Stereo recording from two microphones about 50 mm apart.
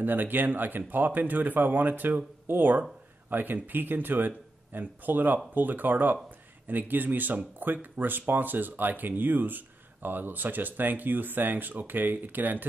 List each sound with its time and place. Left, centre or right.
0.0 s speech: right